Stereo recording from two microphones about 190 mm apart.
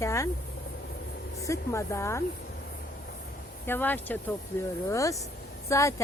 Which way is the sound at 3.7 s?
10° left (ahead or behind).